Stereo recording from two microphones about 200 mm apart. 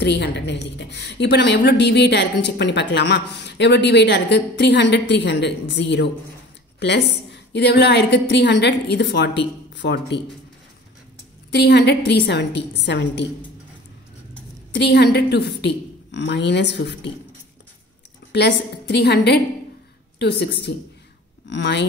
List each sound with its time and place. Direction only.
0.0 s a woman's voice: 55° left (ahead or behind)
11.5 s a woman's voice: 55° left (ahead or behind)
14.8 s a woman's voice: 55° left (ahead or behind)
18.3 s a woman's voice: 55° left (ahead or behind)
21.5 s a woman's voice: 60° left (ahead or behind)